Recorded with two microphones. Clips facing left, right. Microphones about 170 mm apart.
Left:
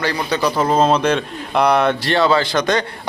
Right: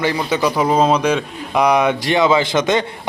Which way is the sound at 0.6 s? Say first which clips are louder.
Even; 5° right (ahead or behind).